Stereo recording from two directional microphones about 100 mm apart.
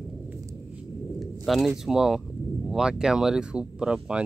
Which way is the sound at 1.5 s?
Centre (ahead or behind).